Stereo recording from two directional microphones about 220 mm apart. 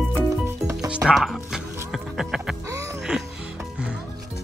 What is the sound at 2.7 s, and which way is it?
Music, 15° right (ahead or behind).